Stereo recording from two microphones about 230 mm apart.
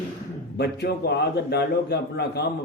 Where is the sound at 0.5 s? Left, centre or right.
Left.